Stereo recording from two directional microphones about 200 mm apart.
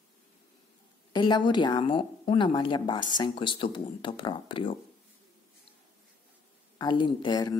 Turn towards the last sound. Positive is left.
turn(degrees=20)  # may be behind; listen again after turning